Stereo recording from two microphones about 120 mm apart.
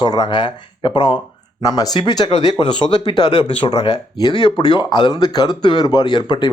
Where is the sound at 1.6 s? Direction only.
30° left (ahead or behind).